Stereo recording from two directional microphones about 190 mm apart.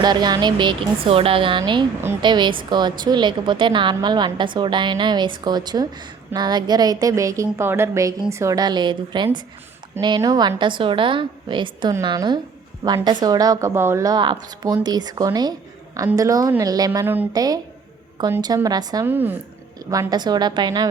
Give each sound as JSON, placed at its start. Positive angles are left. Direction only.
{"t": 0.0, "sound": "a woman's voice", "side_deg": -20}